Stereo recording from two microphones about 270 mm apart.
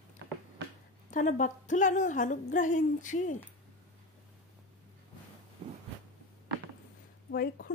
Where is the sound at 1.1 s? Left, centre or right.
Left.